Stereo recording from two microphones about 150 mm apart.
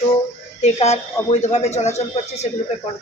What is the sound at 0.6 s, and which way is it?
Speech, 50° left (ahead or behind).